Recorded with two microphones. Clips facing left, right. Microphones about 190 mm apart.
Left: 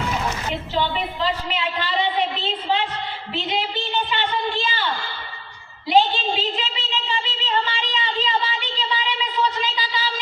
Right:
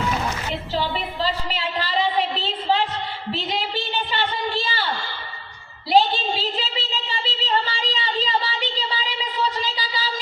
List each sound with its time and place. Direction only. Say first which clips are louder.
0.7 s a woman's voice: left 2 dB; 35° right (ahead or behind)
3.3 s a woman's voice: left 2 dB; 40° right (ahead or behind)
5.9 s a sound: even; 40° right (ahead or behind)